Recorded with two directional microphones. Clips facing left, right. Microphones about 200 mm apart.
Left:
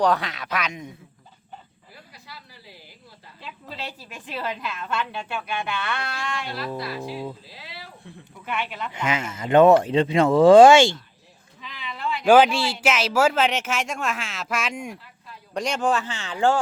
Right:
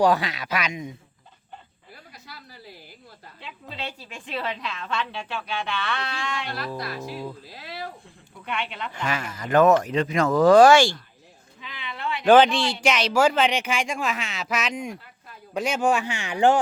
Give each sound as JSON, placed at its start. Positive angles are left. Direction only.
{"t": 0.0, "sound": "speech", "side_deg": -5}
{"t": 2.1, "sound": "a sound", "side_deg": -45}
{"t": 3.4, "sound": "speech", "side_deg": 5}
{"t": 7.4, "sound": "speech", "side_deg": -50}
{"t": 8.4, "sound": "speech", "side_deg": 5}
{"t": 8.9, "sound": "speech", "side_deg": 20}
{"t": 11.6, "sound": "speech", "side_deg": 0}
{"t": 15.5, "sound": "speech", "side_deg": -5}